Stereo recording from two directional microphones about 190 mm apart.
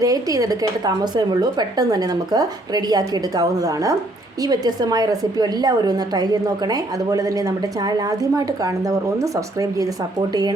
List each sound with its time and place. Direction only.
0.0 s a woman's voice: 20° right (ahead or behind)